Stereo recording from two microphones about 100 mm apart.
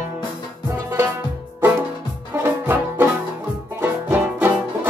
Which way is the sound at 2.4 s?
25° right (ahead or behind).